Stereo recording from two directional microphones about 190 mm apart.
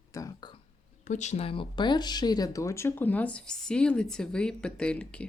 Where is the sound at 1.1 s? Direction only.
40° left (ahead or behind).